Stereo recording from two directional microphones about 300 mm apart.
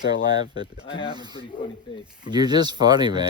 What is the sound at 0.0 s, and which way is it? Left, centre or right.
Speech, left.